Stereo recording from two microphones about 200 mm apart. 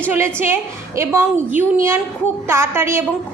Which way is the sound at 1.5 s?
10° right (ahead or behind).